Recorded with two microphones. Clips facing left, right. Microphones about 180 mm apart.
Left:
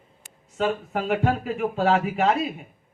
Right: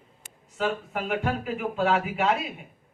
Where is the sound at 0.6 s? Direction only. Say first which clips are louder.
Left 3 dB; 35° left (ahead or behind).